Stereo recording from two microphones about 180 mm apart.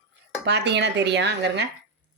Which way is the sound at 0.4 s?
70° right (ahead or behind).